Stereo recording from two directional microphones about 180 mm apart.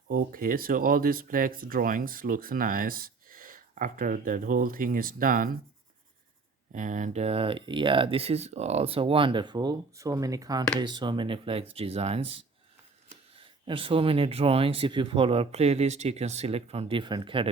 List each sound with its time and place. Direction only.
0.1 s speech: 50° right (ahead or behind)
6.7 s speech: 45° right (ahead or behind); by 17.5 s 30° right (ahead or behind)